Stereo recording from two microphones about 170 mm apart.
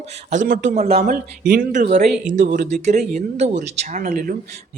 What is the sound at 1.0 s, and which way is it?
Speech, 55° right (ahead or behind).